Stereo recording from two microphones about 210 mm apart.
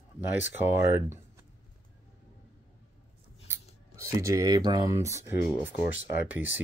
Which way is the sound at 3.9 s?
15° right (ahead or behind).